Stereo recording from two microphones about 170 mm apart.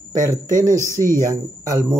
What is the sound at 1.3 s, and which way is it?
Speech, 20° right (ahead or behind).